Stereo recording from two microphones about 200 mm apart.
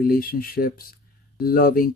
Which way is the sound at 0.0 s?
50° left (ahead or behind).